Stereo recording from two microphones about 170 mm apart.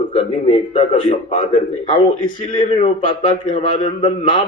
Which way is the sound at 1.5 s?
45° left (ahead or behind).